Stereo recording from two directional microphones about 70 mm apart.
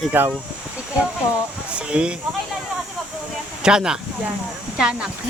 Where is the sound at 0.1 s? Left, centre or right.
Right.